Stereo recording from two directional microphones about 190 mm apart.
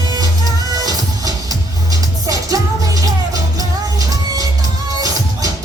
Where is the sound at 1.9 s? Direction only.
20° right (ahead or behind).